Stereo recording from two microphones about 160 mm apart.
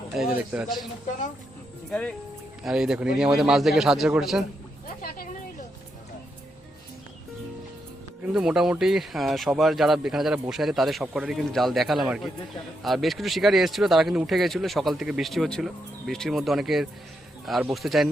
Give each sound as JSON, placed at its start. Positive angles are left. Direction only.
{"t": 0.1, "sound": "speech", "side_deg": -5}
{"t": 1.9, "sound": "speech", "side_deg": 5}
{"t": 4.9, "sound": "a sound", "side_deg": 70}
{"t": 8.3, "sound": "speech", "side_deg": -5}